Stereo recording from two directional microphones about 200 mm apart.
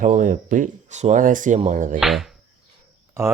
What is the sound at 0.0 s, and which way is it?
Speech, 40° right (ahead or behind).